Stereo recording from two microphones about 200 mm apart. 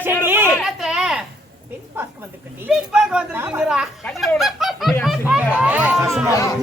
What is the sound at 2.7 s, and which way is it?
Speech, 5° right (ahead or behind).